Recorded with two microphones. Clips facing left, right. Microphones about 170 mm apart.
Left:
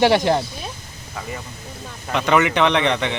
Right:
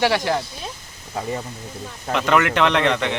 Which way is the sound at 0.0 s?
25° left (ahead or behind).